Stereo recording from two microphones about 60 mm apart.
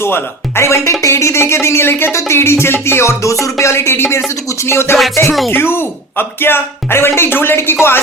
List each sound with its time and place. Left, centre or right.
0.0 s music: left
5.5 s speech: left
7.2 s music: left